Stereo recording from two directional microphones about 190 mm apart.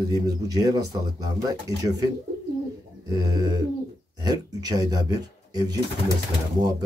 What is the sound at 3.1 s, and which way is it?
A man's voice, 20° right (ahead or behind).